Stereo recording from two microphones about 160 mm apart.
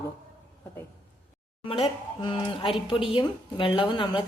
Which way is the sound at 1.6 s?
35° left (ahead or behind).